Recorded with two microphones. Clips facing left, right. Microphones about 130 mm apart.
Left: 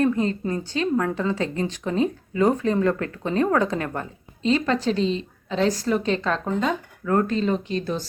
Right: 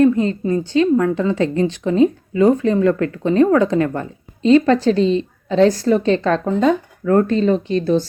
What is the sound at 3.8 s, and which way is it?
A woman's voice, 35° right (ahead or behind).